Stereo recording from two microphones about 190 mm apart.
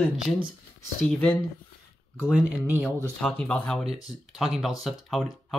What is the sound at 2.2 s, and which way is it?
Speech, 5° right (ahead or behind).